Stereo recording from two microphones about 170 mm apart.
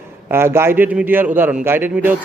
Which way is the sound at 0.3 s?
15° right (ahead or behind).